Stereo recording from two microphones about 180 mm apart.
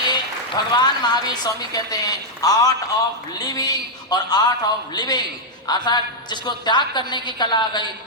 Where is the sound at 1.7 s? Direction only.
20° left (ahead or behind).